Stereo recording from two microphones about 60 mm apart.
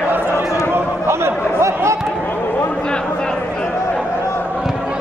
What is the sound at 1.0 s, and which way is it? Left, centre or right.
Chatter, right.